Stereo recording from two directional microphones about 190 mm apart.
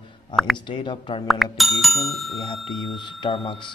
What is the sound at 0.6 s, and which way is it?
Speech, 25° left (ahead or behind).